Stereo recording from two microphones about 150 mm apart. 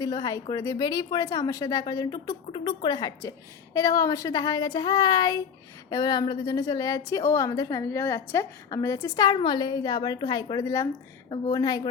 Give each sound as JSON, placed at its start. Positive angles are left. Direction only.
{"t": 0.0, "sound": "a woman's voice", "side_deg": 25}